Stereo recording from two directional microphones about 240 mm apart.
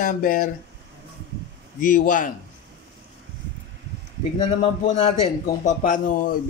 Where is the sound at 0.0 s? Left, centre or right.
Left.